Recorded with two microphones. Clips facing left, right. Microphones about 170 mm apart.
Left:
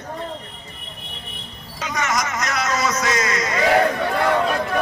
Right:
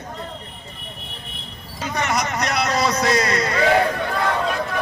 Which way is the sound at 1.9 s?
30° right (ahead or behind).